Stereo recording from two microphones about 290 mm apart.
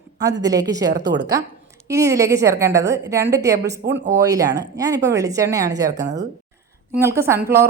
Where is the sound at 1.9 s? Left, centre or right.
Centre.